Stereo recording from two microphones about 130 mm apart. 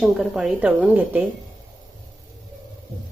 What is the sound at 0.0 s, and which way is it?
A woman's voice, centre (ahead or behind).